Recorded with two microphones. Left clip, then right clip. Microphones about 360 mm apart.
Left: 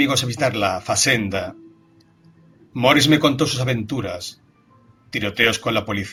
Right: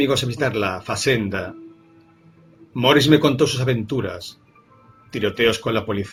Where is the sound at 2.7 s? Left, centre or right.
Centre.